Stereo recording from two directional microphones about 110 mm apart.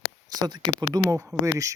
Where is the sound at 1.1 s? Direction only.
30° right (ahead or behind).